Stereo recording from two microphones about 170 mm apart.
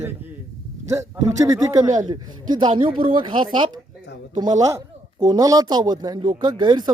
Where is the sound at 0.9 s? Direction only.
20° right (ahead or behind).